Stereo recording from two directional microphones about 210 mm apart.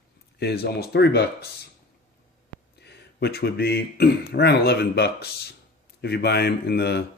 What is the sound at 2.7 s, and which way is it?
Speech, 50° left (ahead or behind).